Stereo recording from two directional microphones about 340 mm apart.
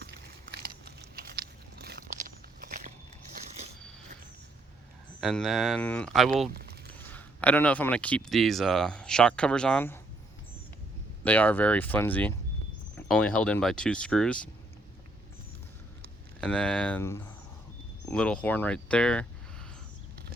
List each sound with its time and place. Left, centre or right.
0.5 s biting: right
5.2 s speech: centre
6.5 s a sound: right
7.0 s speech: centre
11.2 s speech: centre
16.4 s speech: centre